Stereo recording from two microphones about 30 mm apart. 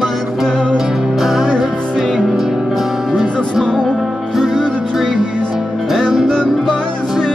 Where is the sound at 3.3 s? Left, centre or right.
Left.